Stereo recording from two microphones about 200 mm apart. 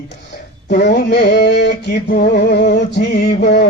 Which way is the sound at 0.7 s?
55° left (ahead or behind).